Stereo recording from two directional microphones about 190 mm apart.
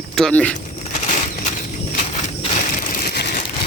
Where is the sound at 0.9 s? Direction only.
40° left (ahead or behind).